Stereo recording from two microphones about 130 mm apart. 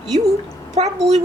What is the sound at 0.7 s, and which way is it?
Speech, 55° right (ahead or behind).